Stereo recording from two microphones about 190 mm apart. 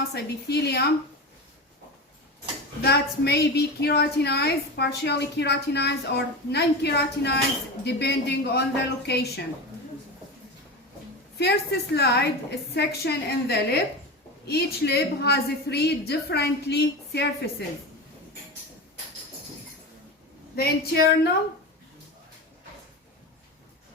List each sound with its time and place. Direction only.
0.0 s a woman's voice: 60° left (ahead or behind)
2.8 s a woman's voice: 60° left (ahead or behind)
11.3 s a woman's voice: 60° left (ahead or behind)
20.6 s a woman's voice: 55° left (ahead or behind)